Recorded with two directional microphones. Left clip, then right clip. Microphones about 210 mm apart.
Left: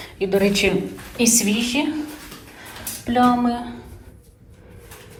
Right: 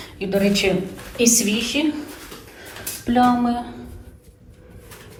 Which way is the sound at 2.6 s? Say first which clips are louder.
Even; 10° right (ahead or behind).